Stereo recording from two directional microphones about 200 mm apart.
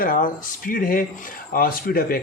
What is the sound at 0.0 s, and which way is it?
Speech, 45° left (ahead or behind).